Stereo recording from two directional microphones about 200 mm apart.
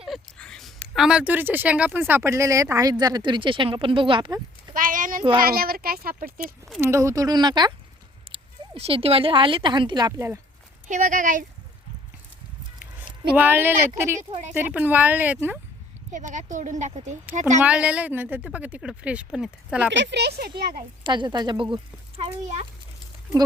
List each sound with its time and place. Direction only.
0.0 s speech: centre (ahead or behind); by 4.4 s 25° right (ahead or behind)
4.7 s a sound: 40° right (ahead or behind)
5.4 s speech: 50° right (ahead or behind)
6.8 s speech: 15° right (ahead or behind)
10.8 s speech: 40° right (ahead or behind)
13.3 s a woman's voice: 10° right (ahead or behind)
16.1 s speech: 40° right (ahead or behind)
17.6 s a woman's voice: 5° right (ahead or behind)
19.9 s speech: 65° right (ahead or behind)
21.0 s speech: 25° right (ahead or behind)